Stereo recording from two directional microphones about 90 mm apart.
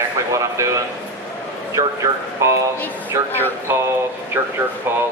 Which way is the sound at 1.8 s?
35° right (ahead or behind).